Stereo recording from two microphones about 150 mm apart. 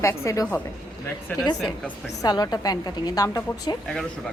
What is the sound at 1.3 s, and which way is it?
Speech, 10° left (ahead or behind).